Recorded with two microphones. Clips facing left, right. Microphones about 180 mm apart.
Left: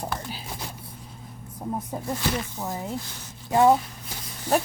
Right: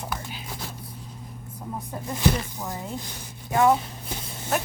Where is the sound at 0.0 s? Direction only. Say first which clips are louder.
Left 2 dB; 35° left (ahead or behind).